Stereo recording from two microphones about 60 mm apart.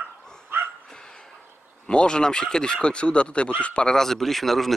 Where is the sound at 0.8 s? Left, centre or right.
Centre.